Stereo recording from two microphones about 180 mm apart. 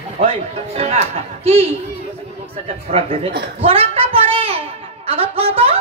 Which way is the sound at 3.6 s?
30° right (ahead or behind).